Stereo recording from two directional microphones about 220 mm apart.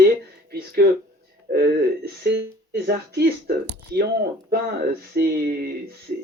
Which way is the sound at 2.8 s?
45° right (ahead or behind).